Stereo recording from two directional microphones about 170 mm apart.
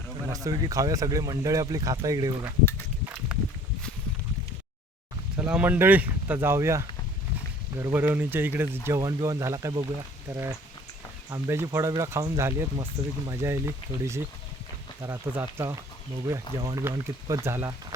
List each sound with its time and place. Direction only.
0.3 s speech: 20° right (ahead or behind)
5.5 s speech: 5° right (ahead or behind)